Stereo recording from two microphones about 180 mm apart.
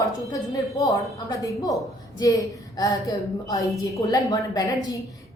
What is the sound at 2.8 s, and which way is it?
A woman's voice, 20° left (ahead or behind).